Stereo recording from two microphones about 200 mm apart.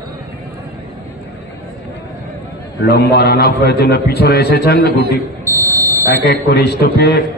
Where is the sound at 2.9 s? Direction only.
50° left (ahead or behind).